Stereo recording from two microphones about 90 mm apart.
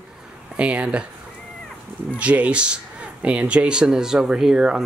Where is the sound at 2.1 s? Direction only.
15° right (ahead or behind).